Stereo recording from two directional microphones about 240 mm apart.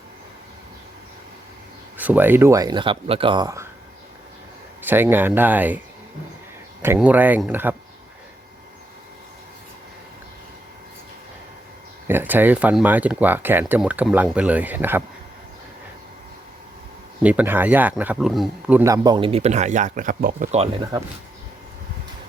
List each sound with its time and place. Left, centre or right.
2.0 s speech: centre
4.8 s speech: centre
6.8 s speech: centre
12.0 s speech: centre
17.2 s speech: centre
18.8 s speech: centre